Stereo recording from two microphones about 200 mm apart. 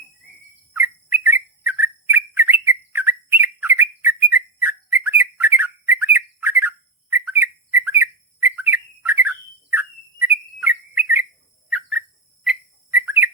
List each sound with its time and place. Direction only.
0.7 s bird: 10° right (ahead or behind)
11.7 s dog: 5° right (ahead or behind)
12.5 s bird: 10° right (ahead or behind)